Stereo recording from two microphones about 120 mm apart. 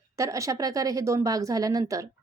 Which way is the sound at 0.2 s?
25° right (ahead or behind).